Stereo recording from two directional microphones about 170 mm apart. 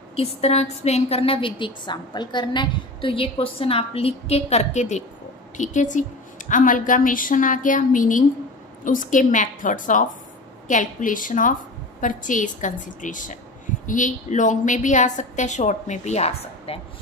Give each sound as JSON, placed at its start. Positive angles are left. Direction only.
{"t": 0.4, "sound": "a woman's voice", "side_deg": 40}